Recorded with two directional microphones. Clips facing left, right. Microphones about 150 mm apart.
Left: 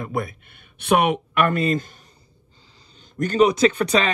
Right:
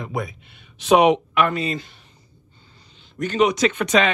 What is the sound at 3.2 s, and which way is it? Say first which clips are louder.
Speech: left 2 dB; 35° left (ahead or behind).